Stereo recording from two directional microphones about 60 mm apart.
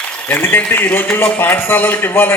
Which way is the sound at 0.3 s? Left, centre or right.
Left.